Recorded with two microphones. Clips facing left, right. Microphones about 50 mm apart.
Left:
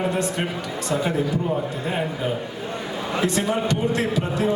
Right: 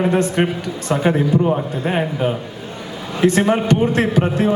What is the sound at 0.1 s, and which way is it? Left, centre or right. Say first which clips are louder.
A man's voice: right 7 dB; right.